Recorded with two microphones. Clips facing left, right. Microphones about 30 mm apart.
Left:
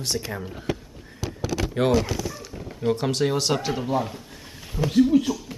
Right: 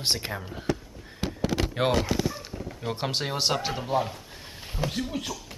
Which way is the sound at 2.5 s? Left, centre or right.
Centre.